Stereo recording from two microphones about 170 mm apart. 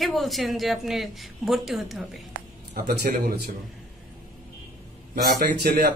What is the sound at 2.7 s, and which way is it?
Speech, 55° right (ahead or behind).